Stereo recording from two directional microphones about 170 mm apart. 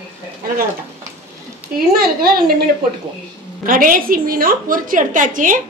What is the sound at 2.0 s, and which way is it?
Speech, 60° right (ahead or behind).